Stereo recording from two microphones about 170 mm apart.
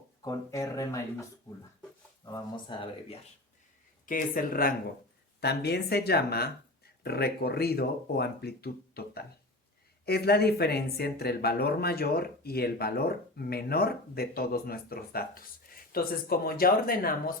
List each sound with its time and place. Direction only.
0.2 s speech: 20° left (ahead or behind)
4.0 s speech: 55° left (ahead or behind)
5.4 s speech: 75° left (ahead or behind); by 17.3 s 60° left (ahead or behind)